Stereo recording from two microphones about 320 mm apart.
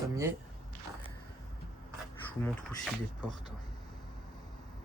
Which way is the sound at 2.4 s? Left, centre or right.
Centre.